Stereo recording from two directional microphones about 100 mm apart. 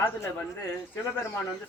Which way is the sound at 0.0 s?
20° left (ahead or behind).